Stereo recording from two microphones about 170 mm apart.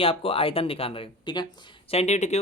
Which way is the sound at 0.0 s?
35° left (ahead or behind).